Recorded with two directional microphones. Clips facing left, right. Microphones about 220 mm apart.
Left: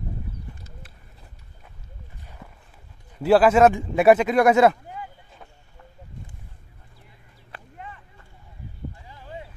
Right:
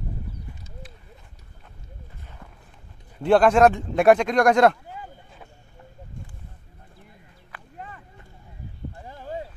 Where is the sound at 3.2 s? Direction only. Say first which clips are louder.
Left 1 dB; 5° left (ahead or behind).